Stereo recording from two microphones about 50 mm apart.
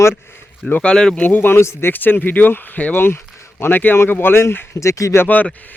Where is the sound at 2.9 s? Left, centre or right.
Left.